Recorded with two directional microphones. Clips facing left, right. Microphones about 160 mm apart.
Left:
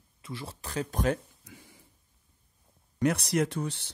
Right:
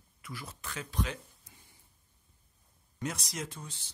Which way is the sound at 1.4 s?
90° left.